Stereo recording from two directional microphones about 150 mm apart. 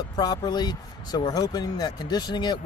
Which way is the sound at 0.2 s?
25° left (ahead or behind).